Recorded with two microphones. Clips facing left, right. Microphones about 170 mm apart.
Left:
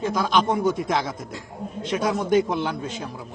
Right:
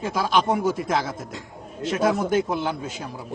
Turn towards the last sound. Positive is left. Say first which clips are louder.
# even
turn(degrees=-5)  # may be behind; listen again after turning